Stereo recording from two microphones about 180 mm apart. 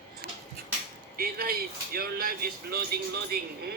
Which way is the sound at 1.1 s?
55° right (ahead or behind).